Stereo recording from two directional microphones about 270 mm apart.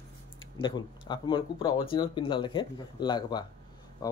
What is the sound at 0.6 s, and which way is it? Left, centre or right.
Speech, centre.